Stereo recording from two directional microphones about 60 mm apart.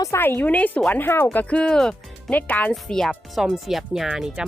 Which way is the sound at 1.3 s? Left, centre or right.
Left.